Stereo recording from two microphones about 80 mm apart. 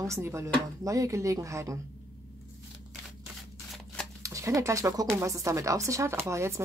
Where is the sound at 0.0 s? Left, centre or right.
Right.